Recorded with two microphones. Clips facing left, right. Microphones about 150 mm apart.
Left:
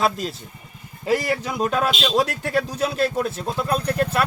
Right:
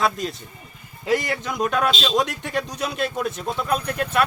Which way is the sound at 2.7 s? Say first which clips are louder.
Left 4 dB; 30° left (ahead or behind).